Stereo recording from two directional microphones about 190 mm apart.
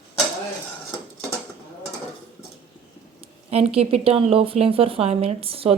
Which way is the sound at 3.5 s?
30° right (ahead or behind).